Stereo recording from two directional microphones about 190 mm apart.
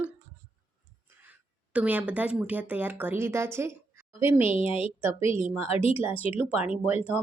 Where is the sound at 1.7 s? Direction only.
5° right (ahead or behind).